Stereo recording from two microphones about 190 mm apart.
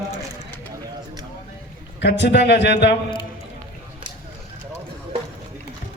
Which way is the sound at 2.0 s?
65° left (ahead or behind).